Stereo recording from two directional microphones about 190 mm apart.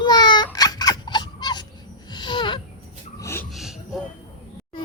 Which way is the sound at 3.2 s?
15° left (ahead or behind).